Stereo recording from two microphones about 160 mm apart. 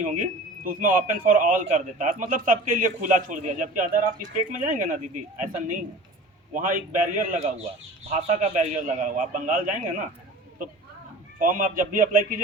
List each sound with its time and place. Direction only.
0.0 s a man's voice: 55° right (ahead or behind)
11.3 s speech: 55° right (ahead or behind)